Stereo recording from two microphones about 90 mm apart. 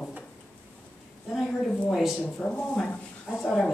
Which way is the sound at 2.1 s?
15° left (ahead or behind).